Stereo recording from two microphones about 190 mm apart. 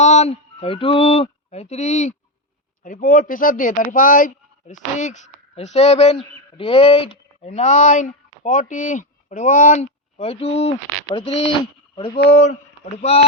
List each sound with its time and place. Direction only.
0.0 s speech: 35° left (ahead or behind)